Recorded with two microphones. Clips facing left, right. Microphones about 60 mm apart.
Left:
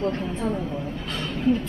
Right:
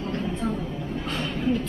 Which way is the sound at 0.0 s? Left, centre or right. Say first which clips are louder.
Left 3 dB; left.